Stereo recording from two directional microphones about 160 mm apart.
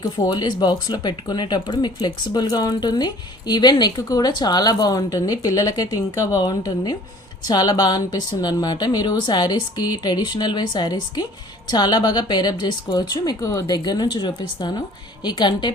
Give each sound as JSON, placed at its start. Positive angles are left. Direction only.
{"t": 0.0, "sound": "speech", "side_deg": 25}